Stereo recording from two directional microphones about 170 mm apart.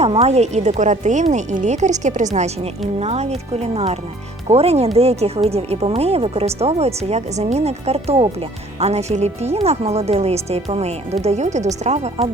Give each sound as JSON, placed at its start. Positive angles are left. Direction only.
{"t": 0.0, "sound": "speech", "side_deg": -40}